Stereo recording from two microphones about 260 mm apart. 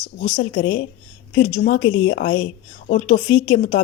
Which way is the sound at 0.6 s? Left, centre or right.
Left.